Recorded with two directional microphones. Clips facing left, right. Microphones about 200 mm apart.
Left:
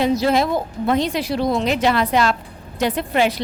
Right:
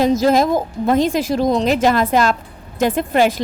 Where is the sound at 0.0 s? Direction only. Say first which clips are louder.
Right 3 dB; 45° right (ahead or behind).